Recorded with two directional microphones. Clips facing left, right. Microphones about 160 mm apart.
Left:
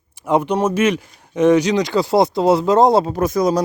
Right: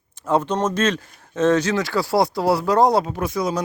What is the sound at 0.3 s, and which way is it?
Speech, 15° left (ahead or behind).